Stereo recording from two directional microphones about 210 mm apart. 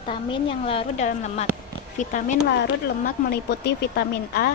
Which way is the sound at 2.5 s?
50° left (ahead or behind).